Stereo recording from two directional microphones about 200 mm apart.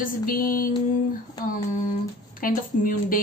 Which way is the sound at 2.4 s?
45° left (ahead or behind).